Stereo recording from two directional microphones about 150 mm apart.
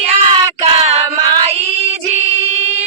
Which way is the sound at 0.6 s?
45° right (ahead or behind).